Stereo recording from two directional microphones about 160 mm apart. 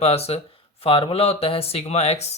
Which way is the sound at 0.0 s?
40° left (ahead or behind).